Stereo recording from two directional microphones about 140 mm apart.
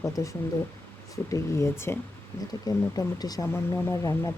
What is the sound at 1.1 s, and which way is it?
Speech, 20° left (ahead or behind).